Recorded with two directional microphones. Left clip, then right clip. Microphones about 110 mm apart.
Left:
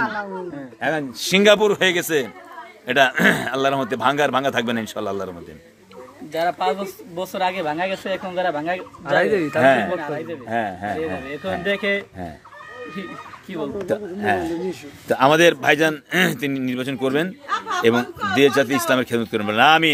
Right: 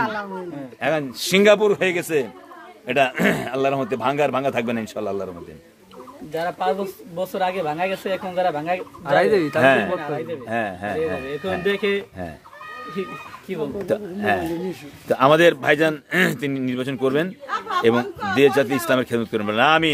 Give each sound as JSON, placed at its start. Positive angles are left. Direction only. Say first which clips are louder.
{"t": 0.0, "sound": "a man's voice", "louder": "even", "side_deg": -25}
{"t": 0.7, "sound": "speech", "louder": "right 1 dB", "side_deg": -10}
{"t": 1.2, "sound": "a man's voice", "louder": "left 1 dB", "side_deg": 10}
{"t": 6.3, "sound": "a man's voice", "louder": "left 2 dB", "side_deg": -35}
{"t": 9.0, "sound": "speech", "louder": "right 1 dB", "side_deg": -15}
{"t": 9.6, "sound": "a man's voice", "louder": "left 2 dB", "side_deg": 0}
{"t": 9.9, "sound": "speech", "louder": "even", "side_deg": -45}
{"t": 10.4, "sound": "a man's voice", "louder": "left 4 dB", "side_deg": 0}
{"t": 11.6, "sound": "speech", "louder": "left 1 dB", "side_deg": -60}
{"t": 13.6, "sound": "a man's voice", "louder": "even", "side_deg": 0}